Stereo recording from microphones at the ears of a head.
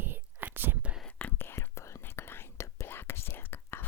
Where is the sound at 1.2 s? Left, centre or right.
Left.